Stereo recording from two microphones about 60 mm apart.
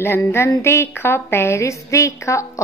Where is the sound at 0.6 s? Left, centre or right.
Left.